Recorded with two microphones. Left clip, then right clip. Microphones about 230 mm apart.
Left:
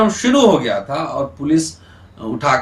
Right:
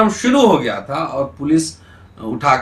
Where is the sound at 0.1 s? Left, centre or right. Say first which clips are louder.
Even; centre.